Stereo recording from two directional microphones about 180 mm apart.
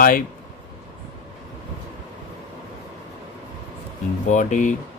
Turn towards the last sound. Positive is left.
turn(degrees=45)  # may be behind; listen again after turning